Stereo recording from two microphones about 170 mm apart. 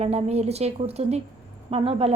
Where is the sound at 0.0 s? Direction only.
40° right (ahead or behind).